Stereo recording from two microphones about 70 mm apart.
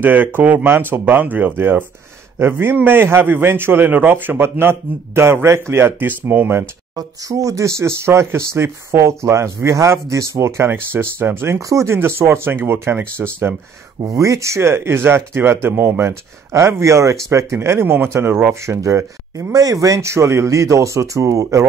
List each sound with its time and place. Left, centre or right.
0.0 s speech: right
7.0 s speech: right
14.1 s speech: right
19.5 s speech: right